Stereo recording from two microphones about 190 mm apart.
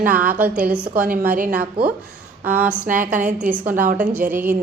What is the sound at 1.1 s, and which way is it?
Speech, 45° right (ahead or behind).